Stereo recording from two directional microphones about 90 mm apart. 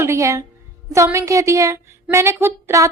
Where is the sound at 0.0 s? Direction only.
30° right (ahead or behind).